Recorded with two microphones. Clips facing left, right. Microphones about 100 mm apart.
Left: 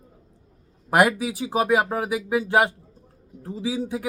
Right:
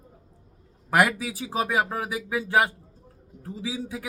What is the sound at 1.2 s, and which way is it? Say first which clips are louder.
Speech: left 4 dB; 15° left (ahead or behind).